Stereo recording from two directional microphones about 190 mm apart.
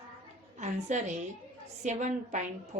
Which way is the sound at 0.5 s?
40° right (ahead or behind).